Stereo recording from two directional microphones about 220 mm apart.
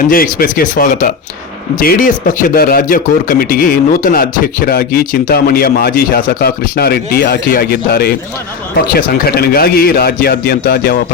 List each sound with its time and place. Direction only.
0.1 s speech: 40° left (ahead or behind)